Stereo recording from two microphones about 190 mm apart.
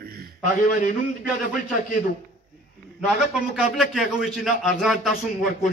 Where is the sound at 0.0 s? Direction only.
55° right (ahead or behind).